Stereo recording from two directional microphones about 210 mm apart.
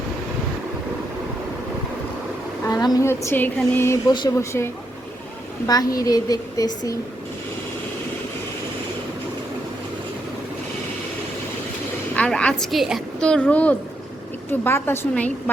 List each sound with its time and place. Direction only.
2.6 s speech: 15° left (ahead or behind)
12.1 s a woman's voice: 5° left (ahead or behind)